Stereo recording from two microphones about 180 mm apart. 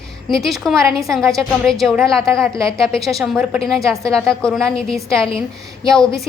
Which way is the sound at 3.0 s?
Centre (ahead or behind).